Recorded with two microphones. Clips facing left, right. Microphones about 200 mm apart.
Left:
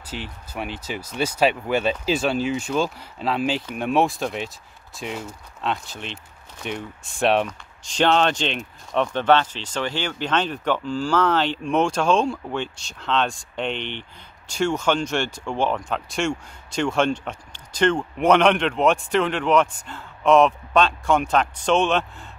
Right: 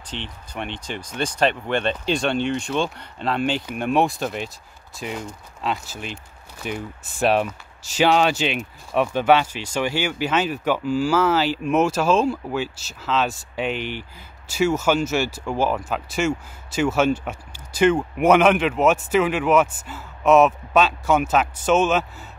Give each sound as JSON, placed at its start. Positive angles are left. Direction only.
{"t": 0.0, "sound": "speech", "side_deg": 5}